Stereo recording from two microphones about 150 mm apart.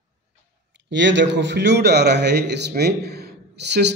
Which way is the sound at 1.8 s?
90° right.